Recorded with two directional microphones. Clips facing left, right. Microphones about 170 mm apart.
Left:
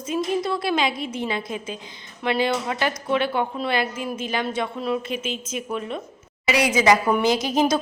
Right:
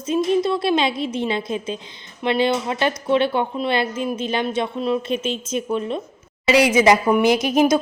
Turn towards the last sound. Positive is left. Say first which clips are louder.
# right 4 dB
turn(degrees=-20)  # may be behind; listen again after turning